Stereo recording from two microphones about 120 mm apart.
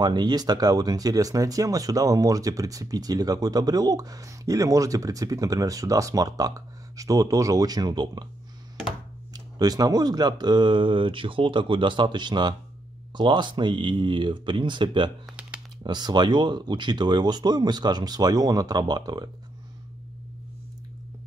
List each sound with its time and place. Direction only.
0.0 s speech: 35° right (ahead or behind)
9.3 s speech: 35° right (ahead or behind)